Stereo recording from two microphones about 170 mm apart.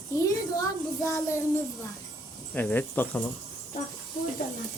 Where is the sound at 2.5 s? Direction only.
10° left (ahead or behind).